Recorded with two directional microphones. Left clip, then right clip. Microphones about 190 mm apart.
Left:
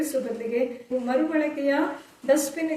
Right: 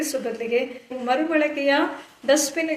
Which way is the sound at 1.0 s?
5° left (ahead or behind).